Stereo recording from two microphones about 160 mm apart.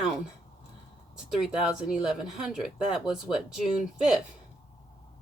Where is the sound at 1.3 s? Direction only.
5° right (ahead or behind).